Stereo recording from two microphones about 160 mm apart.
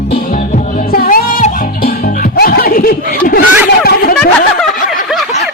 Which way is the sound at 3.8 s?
70° left (ahead or behind).